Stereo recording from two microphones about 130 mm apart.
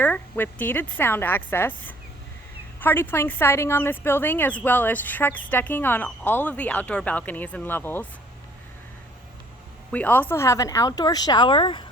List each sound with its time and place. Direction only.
0.0 s speech: 15° left (ahead or behind)
9.9 s speech: 15° left (ahead or behind); by 11.9 s 35° left (ahead or behind)